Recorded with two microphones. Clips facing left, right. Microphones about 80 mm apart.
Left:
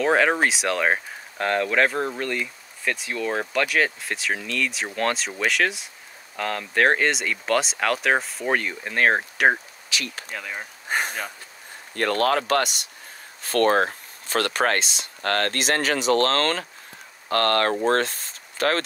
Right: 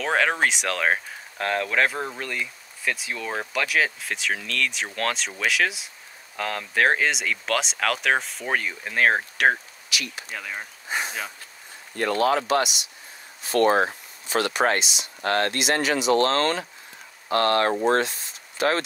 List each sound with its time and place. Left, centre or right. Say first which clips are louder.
0.0 s speech: left 3 dB; centre
10.9 s a sound: left 3 dB; left
11.9 s speech: even; left